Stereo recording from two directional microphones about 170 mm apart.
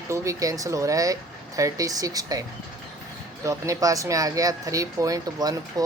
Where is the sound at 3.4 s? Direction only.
20° right (ahead or behind).